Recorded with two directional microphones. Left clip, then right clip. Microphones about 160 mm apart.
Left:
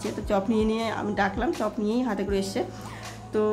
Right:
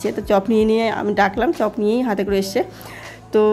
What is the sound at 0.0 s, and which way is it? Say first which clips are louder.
Speech: right 9 dB; 40° right (ahead or behind).